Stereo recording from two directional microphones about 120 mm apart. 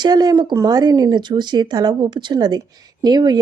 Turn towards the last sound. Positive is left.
turn(degrees=-35)  # may be behind; listen again after turning